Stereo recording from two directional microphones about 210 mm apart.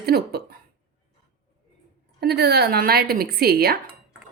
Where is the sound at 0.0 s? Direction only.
50° right (ahead or behind).